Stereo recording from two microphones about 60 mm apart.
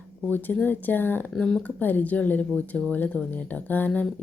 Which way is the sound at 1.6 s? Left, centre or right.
Left.